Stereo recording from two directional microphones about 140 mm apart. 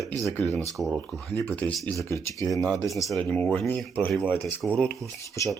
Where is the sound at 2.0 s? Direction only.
20° left (ahead or behind).